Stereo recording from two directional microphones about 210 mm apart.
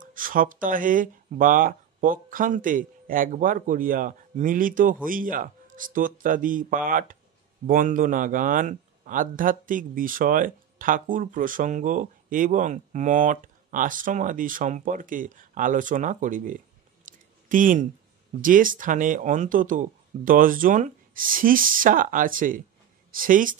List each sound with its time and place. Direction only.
0.0 s speech: 40° right (ahead or behind)
17.0 s a sound: 40° right (ahead or behind)
18.4 s speech: 40° right (ahead or behind)